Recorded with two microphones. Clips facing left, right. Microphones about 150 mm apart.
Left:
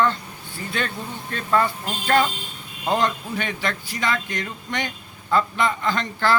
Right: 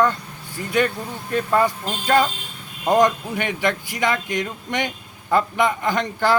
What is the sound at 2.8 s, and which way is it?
Speech, 15° right (ahead or behind).